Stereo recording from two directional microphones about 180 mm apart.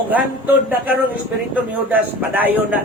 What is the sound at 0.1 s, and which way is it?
A man's voice, 10° right (ahead or behind).